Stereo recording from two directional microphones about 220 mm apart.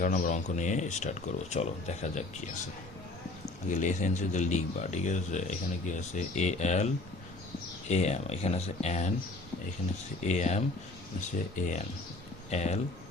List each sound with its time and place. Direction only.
0.0 s speech: 35° left (ahead or behind)
3.7 s speech: 35° left (ahead or behind)
7.9 s speech: 30° left (ahead or behind)
10.2 s speech: 30° left (ahead or behind)